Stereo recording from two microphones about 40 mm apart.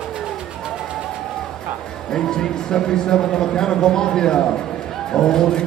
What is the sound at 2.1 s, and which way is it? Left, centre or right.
Speech, centre.